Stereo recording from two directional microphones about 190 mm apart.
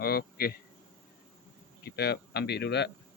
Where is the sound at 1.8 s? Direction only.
60° left (ahead or behind).